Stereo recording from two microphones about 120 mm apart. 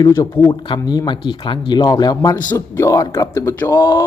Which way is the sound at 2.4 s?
15° left (ahead or behind).